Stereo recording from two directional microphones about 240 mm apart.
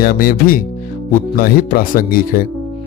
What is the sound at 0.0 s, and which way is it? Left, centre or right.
Speech, left.